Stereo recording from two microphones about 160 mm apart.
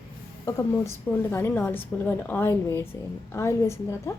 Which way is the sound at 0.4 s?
15° left (ahead or behind).